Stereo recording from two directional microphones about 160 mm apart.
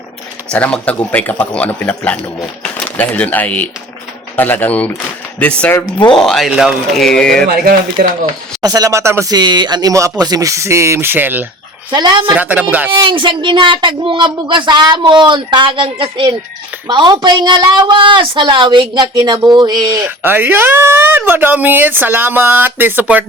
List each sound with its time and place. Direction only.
0.5 s a man's voice: 10° left (ahead or behind)
7.4 s speech: 65° right (ahead or behind)
8.6 s speech: 25° right (ahead or behind)
11.9 s speech: 25° right (ahead or behind)
12.3 s speech: 10° right (ahead or behind)
12.9 s speech: 30° right (ahead or behind)
20.1 s speech: 10° right (ahead or behind)